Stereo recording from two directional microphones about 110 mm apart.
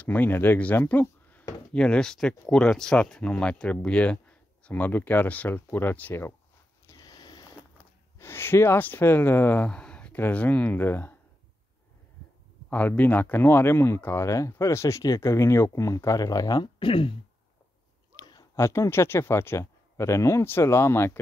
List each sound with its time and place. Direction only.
0.0 s speech: 15° left (ahead or behind)
6.9 s a sound: 40° left (ahead or behind)
8.2 s speech: 20° left (ahead or behind)
12.6 s speech: 15° left (ahead or behind); by 17.1 s 55° left (ahead or behind)
18.1 s a sound: 40° left (ahead or behind)
18.6 s speech: 25° left (ahead or behind)